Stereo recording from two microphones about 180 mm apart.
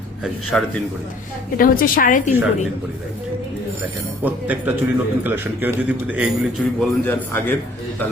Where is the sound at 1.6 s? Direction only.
50° left (ahead or behind).